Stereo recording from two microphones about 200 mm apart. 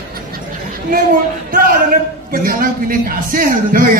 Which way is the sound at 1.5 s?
45° right (ahead or behind).